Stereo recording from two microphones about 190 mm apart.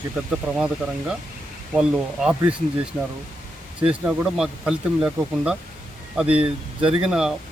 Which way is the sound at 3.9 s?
5° right (ahead or behind).